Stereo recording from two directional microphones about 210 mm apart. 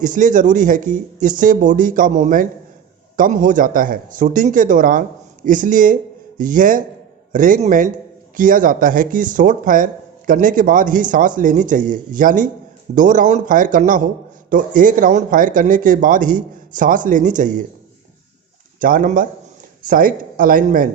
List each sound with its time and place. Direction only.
0.0 s speech: 40° right (ahead or behind)
18.8 s speech: 40° right (ahead or behind)